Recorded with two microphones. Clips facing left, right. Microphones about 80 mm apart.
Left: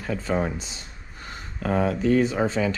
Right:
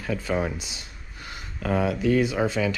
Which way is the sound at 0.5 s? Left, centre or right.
Centre.